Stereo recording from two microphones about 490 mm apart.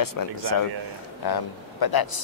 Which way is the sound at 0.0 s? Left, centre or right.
Left.